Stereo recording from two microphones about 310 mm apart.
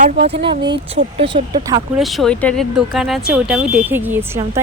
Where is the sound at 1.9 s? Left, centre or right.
Centre.